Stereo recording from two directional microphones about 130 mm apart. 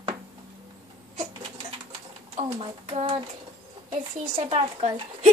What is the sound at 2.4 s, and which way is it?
Child singing, 45° right (ahead or behind).